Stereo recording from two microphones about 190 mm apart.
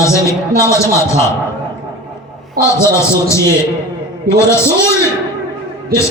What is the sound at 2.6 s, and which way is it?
Speech, 15° left (ahead or behind).